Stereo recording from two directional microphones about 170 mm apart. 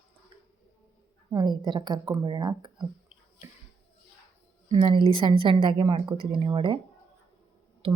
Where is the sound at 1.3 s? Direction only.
25° right (ahead or behind).